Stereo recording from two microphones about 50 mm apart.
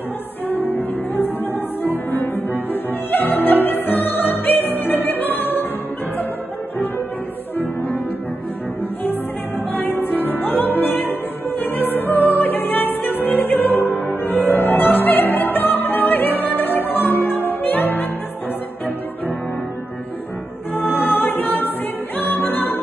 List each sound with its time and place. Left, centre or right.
0.5 s music: left
7.5 s music: left
9.0 s music: left
20.7 s music: left